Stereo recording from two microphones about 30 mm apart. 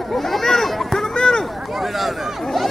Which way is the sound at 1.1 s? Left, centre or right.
Left.